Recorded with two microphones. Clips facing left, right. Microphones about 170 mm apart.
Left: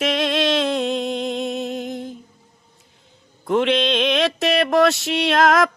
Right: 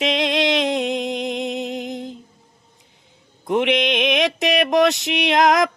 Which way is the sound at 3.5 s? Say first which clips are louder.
Left 1 dB; 15° right (ahead or behind).